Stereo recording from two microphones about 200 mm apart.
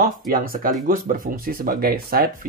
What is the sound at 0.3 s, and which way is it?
Speech, 45° right (ahead or behind).